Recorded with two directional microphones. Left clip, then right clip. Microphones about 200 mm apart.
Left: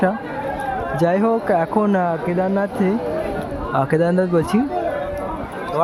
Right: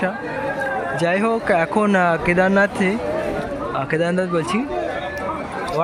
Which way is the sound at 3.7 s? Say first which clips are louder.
Left 4 dB; 25° left (ahead or behind).